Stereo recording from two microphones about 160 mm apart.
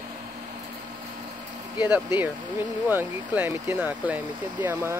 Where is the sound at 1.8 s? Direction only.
10° right (ahead or behind).